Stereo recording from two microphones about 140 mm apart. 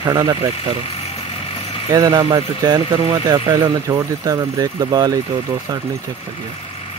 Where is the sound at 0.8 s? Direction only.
45° left (ahead or behind).